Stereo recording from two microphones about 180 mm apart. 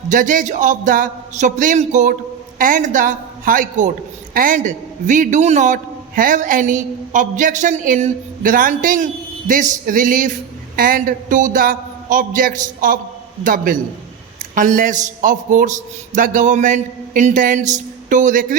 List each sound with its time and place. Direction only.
0.1 s a man's voice: 45° right (ahead or behind)